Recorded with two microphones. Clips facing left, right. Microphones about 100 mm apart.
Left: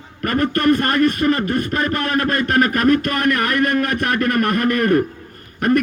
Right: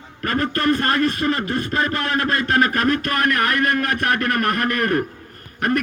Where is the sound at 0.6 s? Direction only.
55° left (ahead or behind).